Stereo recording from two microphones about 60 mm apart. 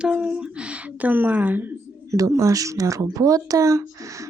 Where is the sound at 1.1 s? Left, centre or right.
Right.